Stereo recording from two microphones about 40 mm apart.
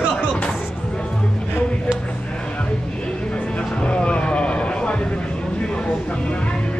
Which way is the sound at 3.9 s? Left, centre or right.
Left.